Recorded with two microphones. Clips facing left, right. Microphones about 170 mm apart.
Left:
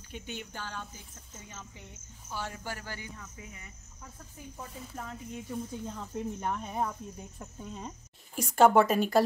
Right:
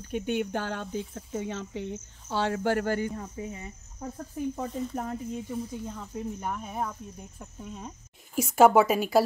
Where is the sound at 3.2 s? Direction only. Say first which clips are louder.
Right 11 dB; 35° right (ahead or behind).